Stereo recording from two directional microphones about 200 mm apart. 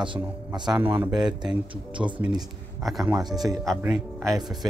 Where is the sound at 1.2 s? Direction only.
Centre (ahead or behind); by 3.6 s 20° right (ahead or behind).